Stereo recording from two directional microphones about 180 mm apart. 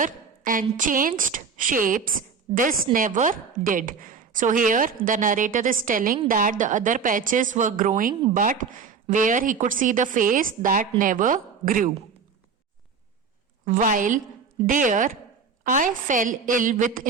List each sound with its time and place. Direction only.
0.0 s a sound: 50° right (ahead or behind)
0.8 s a woman's voice: 50° right (ahead or behind)
13.7 s a woman's voice: 45° right (ahead or behind)